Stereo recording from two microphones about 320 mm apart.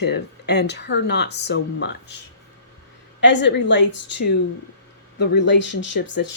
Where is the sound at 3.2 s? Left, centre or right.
Left.